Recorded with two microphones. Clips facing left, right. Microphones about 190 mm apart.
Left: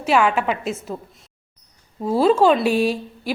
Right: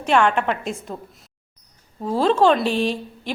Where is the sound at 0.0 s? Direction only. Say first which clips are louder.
Even; 5° left (ahead or behind).